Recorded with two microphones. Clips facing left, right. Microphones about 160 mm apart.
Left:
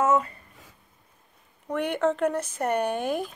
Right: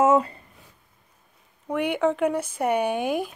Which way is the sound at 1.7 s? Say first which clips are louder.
Right 2 dB; 10° right (ahead or behind).